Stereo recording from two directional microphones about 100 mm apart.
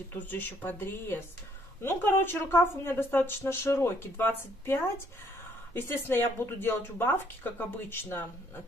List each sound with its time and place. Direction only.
0.1 s speech: 20° left (ahead or behind)